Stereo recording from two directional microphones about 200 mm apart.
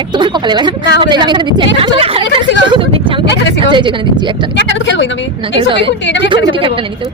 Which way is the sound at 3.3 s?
60° left (ahead or behind).